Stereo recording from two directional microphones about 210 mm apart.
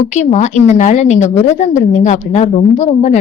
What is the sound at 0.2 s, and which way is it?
A woman's voice, 35° left (ahead or behind).